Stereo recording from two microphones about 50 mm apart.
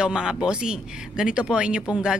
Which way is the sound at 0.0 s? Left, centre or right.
Centre.